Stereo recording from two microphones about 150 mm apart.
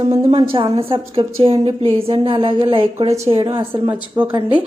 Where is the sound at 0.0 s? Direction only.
40° right (ahead or behind).